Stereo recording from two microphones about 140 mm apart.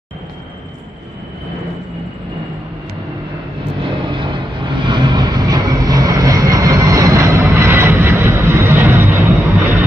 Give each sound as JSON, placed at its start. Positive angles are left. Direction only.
{"t": 4.1, "sound": "vehicle", "side_deg": -35}